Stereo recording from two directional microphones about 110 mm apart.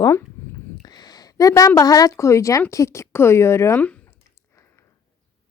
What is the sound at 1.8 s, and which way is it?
Speech, 35° left (ahead or behind).